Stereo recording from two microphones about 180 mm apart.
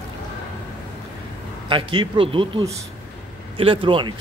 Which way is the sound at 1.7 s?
25° right (ahead or behind).